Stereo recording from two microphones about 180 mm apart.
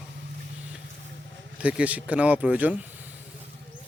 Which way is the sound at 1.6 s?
5° right (ahead or behind).